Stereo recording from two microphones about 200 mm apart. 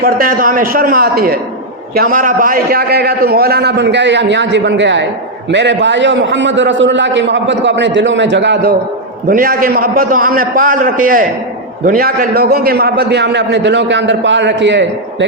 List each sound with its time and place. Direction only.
0.0 s a man's voice: 45° right (ahead or behind); by 8.7 s 60° right (ahead or behind)
9.2 s a man's voice: 45° right (ahead or behind); by 14.8 s 65° right (ahead or behind)